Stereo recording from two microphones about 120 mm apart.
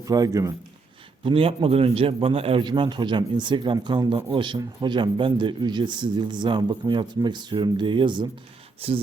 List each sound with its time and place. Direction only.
0.0 s speech: 30° right (ahead or behind)
1.2 s a man's voice: 50° right (ahead or behind)
8.8 s a man's voice: 50° right (ahead or behind)